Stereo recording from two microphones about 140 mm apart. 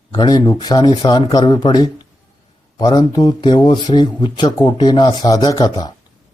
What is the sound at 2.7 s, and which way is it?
A man's voice, 30° left (ahead or behind).